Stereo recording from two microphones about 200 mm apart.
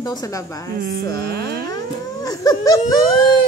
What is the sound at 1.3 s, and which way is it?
Speech, 50° right (ahead or behind).